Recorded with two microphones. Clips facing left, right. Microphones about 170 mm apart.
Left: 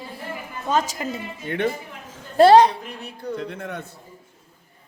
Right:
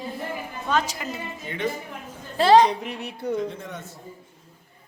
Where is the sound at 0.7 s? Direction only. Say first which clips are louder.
Left 2 dB; 45° left (ahead or behind).